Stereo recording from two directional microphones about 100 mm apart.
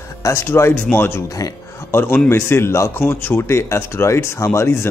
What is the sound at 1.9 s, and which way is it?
Speech, 25° left (ahead or behind).